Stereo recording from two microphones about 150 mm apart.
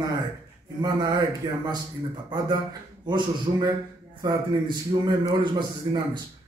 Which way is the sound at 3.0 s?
30° right (ahead or behind).